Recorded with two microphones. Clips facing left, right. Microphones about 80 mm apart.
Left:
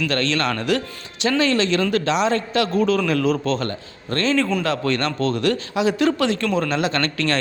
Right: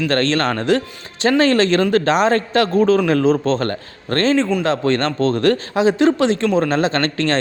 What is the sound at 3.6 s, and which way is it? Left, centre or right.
Speech, right.